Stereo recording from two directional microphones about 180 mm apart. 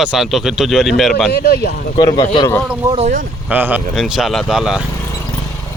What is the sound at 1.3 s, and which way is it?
Speech, 60° left (ahead or behind).